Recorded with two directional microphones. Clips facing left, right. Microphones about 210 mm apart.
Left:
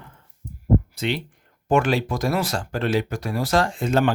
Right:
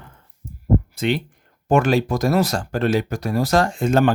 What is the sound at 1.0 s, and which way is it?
Speech, 50° right (ahead or behind).